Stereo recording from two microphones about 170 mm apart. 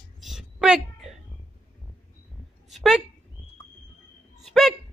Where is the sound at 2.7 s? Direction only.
Centre (ahead or behind).